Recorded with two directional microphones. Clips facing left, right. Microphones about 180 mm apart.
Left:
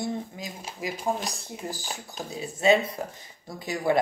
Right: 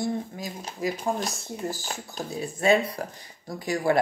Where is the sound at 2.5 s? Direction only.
20° left (ahead or behind).